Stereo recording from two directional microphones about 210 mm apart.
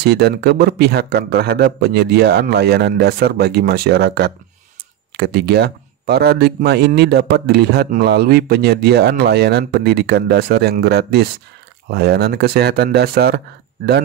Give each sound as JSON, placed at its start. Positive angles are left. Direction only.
{"t": 0.0, "sound": "speech", "side_deg": -50}